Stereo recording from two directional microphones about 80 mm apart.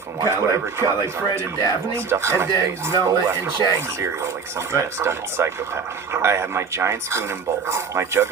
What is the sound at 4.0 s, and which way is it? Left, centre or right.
Speech, right.